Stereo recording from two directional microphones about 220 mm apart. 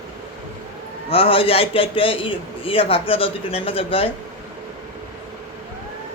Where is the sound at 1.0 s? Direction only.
25° left (ahead or behind).